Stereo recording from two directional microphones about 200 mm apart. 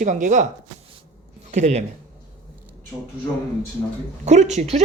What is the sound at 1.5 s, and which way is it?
Speech, 35° right (ahead or behind).